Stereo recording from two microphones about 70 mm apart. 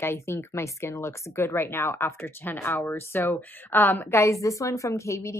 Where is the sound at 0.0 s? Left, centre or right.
Left.